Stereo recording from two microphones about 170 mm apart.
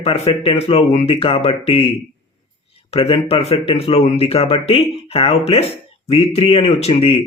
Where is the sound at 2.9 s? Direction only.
35° left (ahead or behind).